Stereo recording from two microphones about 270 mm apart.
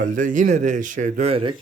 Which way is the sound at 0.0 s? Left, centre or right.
Right.